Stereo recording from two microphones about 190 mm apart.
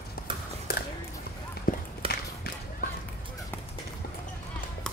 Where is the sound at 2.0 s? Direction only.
30° right (ahead or behind).